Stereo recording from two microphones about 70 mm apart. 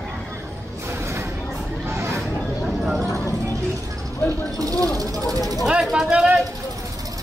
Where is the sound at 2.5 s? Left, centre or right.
Centre.